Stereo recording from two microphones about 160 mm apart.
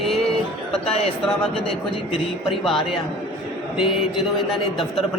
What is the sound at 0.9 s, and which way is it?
Speech, 40° left (ahead or behind).